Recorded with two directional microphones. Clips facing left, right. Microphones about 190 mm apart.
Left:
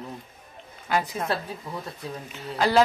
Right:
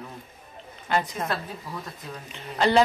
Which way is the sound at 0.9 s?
5° left (ahead or behind).